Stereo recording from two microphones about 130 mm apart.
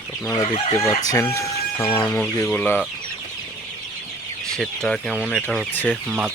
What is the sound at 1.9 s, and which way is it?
Speech, 10° left (ahead or behind).